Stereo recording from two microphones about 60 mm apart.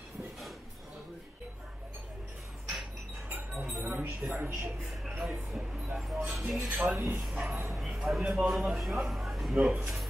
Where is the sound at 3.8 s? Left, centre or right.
Right.